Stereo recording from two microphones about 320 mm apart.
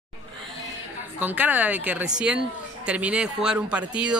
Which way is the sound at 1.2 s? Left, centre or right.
Centre.